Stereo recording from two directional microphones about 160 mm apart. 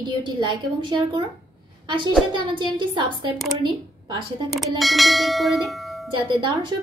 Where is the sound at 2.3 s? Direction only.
30° right (ahead or behind).